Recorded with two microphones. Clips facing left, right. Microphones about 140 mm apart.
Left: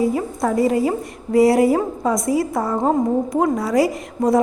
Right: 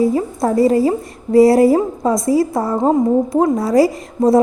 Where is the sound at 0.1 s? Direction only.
35° right (ahead or behind).